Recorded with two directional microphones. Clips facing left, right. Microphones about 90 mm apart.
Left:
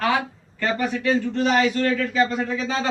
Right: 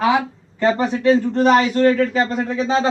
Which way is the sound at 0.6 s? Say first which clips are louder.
Right 7 dB; 30° right (ahead or behind).